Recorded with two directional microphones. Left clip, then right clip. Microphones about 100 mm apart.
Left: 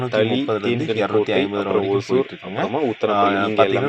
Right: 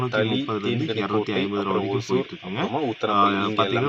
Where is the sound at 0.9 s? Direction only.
35° left (ahead or behind).